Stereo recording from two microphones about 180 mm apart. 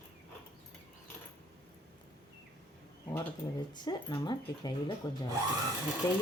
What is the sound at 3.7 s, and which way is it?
Speech, 25° left (ahead or behind).